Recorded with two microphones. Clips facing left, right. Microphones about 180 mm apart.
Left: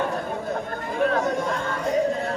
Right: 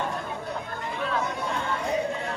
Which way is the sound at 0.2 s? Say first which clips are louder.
Left 5 dB; 45° left (ahead or behind).